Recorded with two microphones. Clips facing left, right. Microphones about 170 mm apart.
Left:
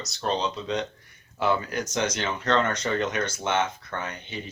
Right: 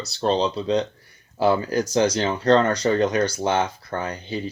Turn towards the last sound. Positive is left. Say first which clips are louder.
# right 6 dB
turn(degrees=-35)  # may be behind; listen again after turning